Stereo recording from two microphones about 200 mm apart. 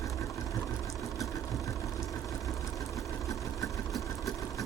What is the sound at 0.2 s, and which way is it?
Vehicle, centre (ahead or behind).